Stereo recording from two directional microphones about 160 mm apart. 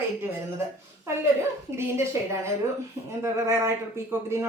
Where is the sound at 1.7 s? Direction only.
15° right (ahead or behind).